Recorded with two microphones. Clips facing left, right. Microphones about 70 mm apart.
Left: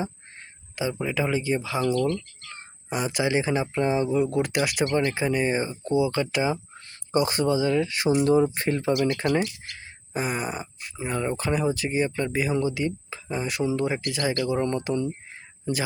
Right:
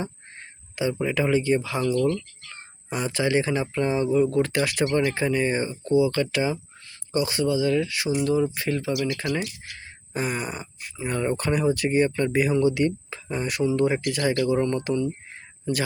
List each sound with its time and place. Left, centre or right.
0.9 s speech: centre
7.1 s speech: left
9.4 s speech: centre
14.4 s speech: centre